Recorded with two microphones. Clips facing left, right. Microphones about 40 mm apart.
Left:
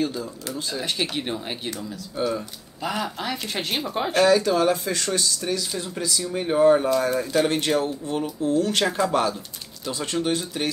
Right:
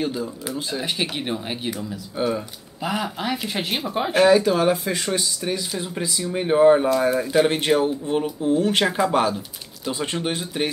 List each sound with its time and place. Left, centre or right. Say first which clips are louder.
0.0 s speech: right 1 dB; centre